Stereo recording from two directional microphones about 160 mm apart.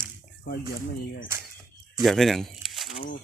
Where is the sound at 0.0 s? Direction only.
70° left (ahead or behind).